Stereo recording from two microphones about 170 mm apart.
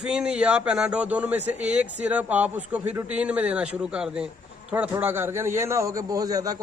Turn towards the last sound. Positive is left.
turn(degrees=-20)  # may be behind; listen again after turning